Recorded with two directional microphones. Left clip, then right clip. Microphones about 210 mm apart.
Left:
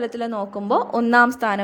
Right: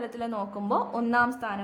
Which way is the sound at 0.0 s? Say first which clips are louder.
Left 7 dB; 25° left (ahead or behind).